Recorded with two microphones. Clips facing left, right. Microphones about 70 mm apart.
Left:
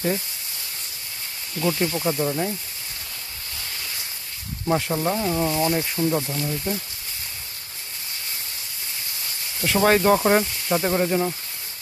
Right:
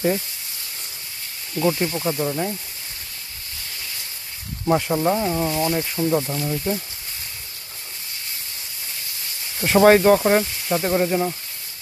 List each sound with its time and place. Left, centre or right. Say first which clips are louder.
1.5 s speech: right 2 dB; centre
4.6 s speech: right 3 dB; centre
9.6 s speech: right 4 dB; right
10.0 s speech: right 2 dB; centre